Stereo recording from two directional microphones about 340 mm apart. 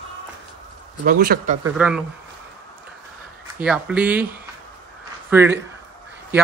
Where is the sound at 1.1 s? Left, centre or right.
Right.